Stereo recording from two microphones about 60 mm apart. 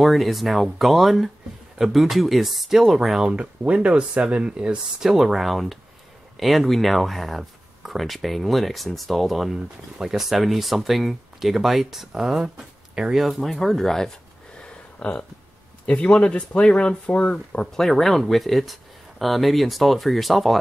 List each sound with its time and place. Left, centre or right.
0.0 s speech: centre
3.3 s speech: centre
15.0 s speech: centre
17.7 s speech: centre